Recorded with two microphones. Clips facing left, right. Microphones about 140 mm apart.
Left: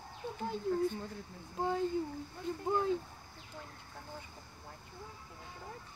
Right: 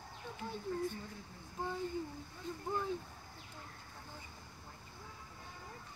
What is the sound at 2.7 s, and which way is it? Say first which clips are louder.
Speech: left 6 dB; 70° left (ahead or behind).